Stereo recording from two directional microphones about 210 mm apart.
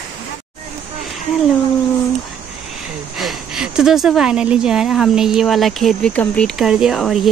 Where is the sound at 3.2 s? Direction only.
Centre (ahead or behind).